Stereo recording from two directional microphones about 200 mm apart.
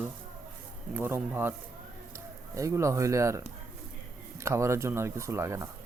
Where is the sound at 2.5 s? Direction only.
15° right (ahead or behind).